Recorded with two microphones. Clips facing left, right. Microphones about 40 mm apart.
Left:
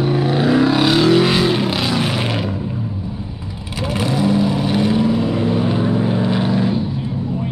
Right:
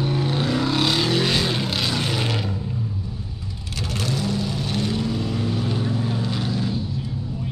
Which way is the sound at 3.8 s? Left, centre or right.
Left.